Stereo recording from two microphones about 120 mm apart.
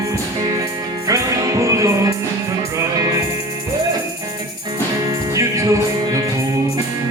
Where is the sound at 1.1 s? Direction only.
30° right (ahead or behind).